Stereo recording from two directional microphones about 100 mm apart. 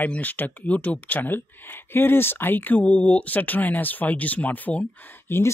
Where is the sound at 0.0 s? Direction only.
15° left (ahead or behind).